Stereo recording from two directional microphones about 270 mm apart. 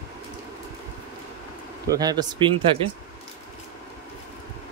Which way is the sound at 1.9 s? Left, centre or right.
Centre.